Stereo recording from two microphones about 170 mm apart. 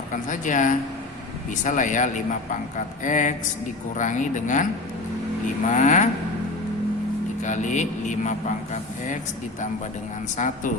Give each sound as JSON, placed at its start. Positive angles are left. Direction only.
{"t": 0.1, "sound": "a man's voice", "side_deg": 50}
{"t": 5.6, "sound": "a man's voice", "side_deg": 45}
{"t": 7.4, "sound": "a man's voice", "side_deg": 45}
{"t": 10.3, "sound": "a man's voice", "side_deg": 50}